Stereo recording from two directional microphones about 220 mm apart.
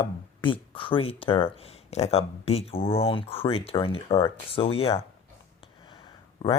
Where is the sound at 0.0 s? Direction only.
25° left (ahead or behind).